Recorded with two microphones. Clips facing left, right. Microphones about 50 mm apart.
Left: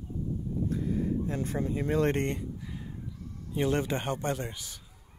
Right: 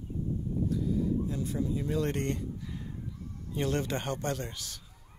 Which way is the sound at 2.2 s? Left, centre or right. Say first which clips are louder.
Left 1 dB; centre.